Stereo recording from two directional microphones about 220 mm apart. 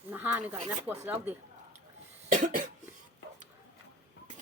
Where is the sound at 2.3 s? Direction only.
40° right (ahead or behind).